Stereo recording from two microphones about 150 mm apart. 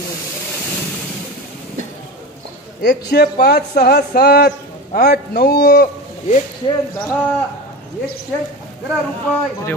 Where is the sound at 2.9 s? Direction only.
90° left.